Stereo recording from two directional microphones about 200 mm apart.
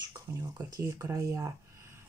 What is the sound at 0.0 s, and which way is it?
Speech, 15° right (ahead or behind).